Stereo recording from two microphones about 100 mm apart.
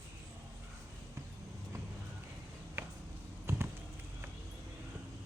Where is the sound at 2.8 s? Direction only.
25° right (ahead or behind).